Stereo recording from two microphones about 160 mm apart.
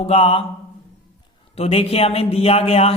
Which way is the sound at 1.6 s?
40° left (ahead or behind).